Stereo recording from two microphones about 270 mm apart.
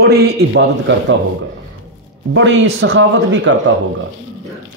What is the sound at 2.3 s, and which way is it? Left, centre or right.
Speech, right.